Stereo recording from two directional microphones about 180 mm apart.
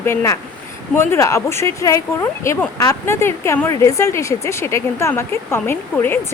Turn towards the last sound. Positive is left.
turn(degrees=10)  # may be behind; listen again after turning